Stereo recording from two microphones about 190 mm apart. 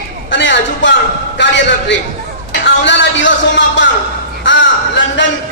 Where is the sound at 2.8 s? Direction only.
75° left (ahead or behind).